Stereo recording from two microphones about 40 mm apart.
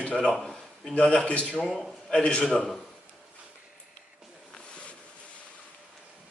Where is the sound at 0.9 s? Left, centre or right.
Left.